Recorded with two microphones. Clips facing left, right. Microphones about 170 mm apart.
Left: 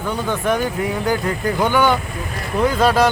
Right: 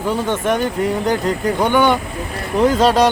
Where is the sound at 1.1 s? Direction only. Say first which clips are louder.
Right 2 dB; 5° left (ahead or behind).